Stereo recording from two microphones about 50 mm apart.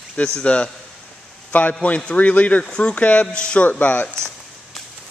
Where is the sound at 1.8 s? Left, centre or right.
Left.